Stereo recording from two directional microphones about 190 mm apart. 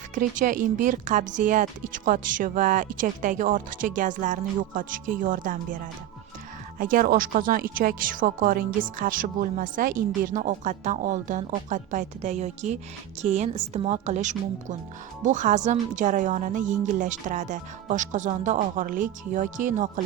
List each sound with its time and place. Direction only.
0.1 s speech: 45° right (ahead or behind)